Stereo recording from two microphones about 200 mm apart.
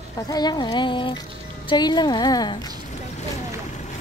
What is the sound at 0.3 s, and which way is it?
Speech, 20° left (ahead or behind).